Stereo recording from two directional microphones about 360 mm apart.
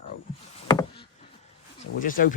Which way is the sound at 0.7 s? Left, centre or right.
Centre.